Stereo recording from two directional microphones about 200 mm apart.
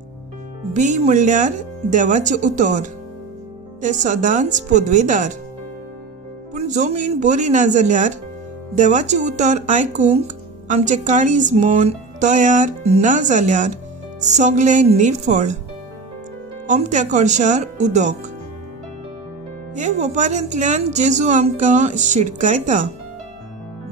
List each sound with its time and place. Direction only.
0.7 s speech: 40° right (ahead or behind)
6.5 s speech: 35° right (ahead or behind)
16.6 s speech: 35° right (ahead or behind)
19.7 s speech: 35° right (ahead or behind)